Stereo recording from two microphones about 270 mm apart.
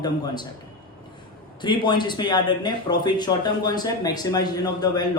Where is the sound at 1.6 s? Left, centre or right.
Centre.